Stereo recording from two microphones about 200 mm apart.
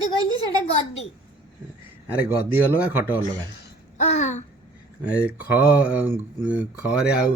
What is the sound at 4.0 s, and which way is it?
Babbling, 35° left (ahead or behind).